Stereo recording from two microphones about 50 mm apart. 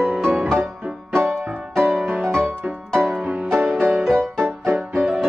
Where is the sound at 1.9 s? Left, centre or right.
Centre.